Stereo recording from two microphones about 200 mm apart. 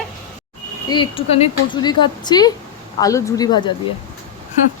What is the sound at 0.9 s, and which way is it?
Speech, 25° left (ahead or behind).